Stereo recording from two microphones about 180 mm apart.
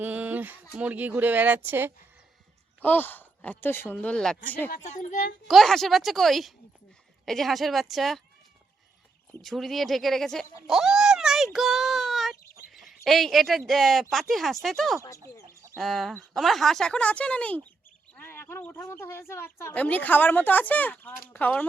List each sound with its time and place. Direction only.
0.0 s speech: 10° right (ahead or behind)
2.8 s speech: 10° left (ahead or behind)
4.7 s a woman's voice: 40° left (ahead or behind)
5.5 s speech: centre (ahead or behind)
9.4 s speech: centre (ahead or behind)
12.7 s bird: centre (ahead or behind)
13.1 s speech: centre (ahead or behind)